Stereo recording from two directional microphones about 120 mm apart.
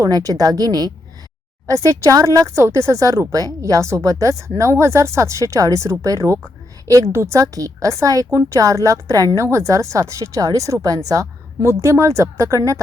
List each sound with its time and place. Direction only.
0.0 s a woman's voice: 30° right (ahead or behind)